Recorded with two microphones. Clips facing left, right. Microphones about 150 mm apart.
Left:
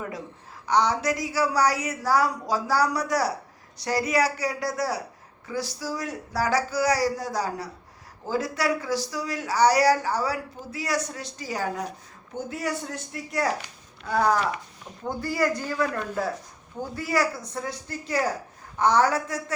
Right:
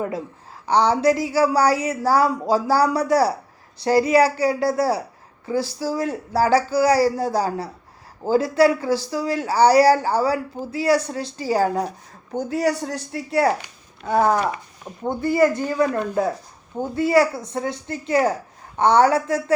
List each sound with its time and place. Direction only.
0.6 s a woman's voice: 30° right (ahead or behind)